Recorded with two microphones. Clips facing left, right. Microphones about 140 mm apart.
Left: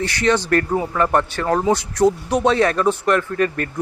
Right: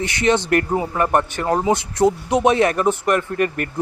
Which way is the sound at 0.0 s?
20° right (ahead or behind).